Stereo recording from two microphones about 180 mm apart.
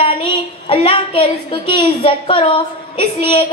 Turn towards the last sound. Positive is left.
turn(degrees=30)  # may be behind; listen again after turning